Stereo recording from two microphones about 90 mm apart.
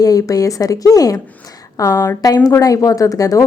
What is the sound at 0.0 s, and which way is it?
A woman's voice, 40° left (ahead or behind).